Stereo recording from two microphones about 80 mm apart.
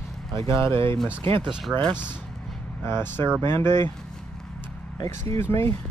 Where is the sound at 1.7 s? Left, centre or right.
Right.